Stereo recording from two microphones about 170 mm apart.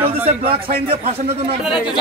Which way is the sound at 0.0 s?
35° right (ahead or behind).